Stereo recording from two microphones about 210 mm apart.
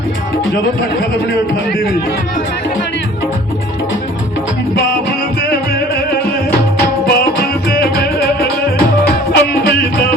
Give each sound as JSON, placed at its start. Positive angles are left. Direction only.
{"t": 7.1, "sound": "music", "side_deg": 50}
{"t": 9.3, "sound": "music", "side_deg": 50}